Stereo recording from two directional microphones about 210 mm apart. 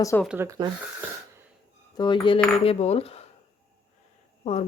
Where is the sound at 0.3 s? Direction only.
10° right (ahead or behind).